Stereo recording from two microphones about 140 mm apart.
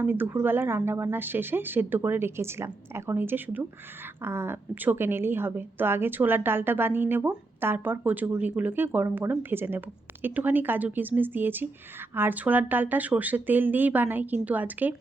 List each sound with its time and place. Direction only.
0.0 s a woman's voice: 15° right (ahead or behind)